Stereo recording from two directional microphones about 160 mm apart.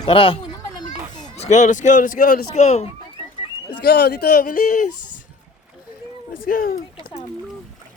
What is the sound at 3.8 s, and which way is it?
Speech, 85° left.